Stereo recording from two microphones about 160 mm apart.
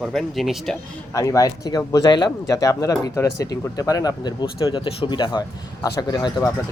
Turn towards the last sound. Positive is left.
turn(degrees=25)  # may be behind; listen again after turning